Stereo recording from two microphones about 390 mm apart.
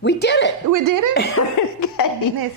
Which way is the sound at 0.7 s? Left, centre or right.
Right.